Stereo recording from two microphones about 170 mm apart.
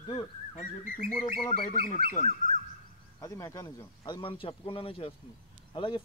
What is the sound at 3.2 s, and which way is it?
A man's voice, 20° left (ahead or behind).